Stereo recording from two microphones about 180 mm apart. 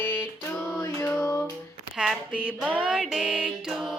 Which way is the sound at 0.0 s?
10° left (ahead or behind).